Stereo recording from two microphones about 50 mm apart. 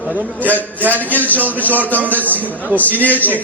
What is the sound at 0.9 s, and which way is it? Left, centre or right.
Speech, left.